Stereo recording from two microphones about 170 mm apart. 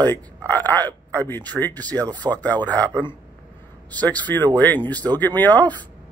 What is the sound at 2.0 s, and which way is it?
Speech, 25° right (ahead or behind).